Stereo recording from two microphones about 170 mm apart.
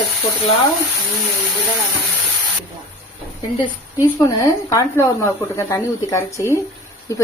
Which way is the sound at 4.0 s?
20° left (ahead or behind).